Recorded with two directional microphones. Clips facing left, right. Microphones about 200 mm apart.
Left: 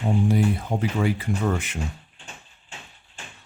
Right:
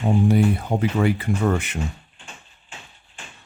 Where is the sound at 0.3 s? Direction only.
65° right (ahead or behind).